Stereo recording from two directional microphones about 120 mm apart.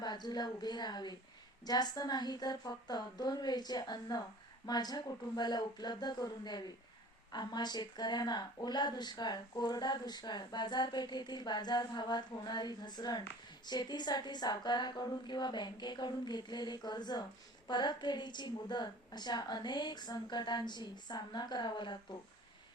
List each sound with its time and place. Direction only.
0.0 s speech: 35° left (ahead or behind)